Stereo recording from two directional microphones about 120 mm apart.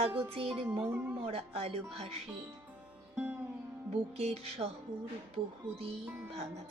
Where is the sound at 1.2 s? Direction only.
55° right (ahead or behind).